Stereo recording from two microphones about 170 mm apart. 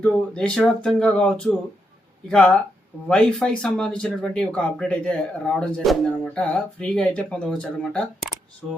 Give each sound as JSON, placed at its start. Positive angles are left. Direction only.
{"t": 0.0, "sound": "speech", "side_deg": 5}